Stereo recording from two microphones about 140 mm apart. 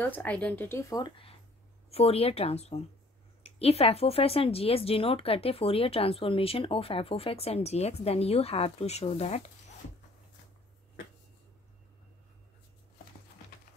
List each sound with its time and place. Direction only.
0.0 s speech: 10° left (ahead or behind); by 9.5 s 50° left (ahead or behind)